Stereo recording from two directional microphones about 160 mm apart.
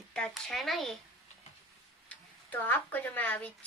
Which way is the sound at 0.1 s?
5° left (ahead or behind).